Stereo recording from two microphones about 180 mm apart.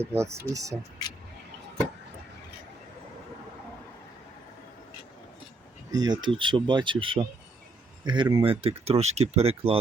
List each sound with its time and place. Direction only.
0.0 s speech: 15° right (ahead or behind)
6.0 s speech: 25° right (ahead or behind)